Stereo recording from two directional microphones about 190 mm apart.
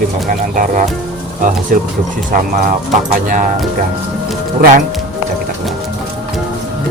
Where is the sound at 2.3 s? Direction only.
45° right (ahead or behind).